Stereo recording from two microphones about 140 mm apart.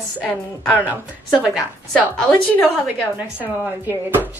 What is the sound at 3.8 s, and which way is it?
Speech, 15° right (ahead or behind).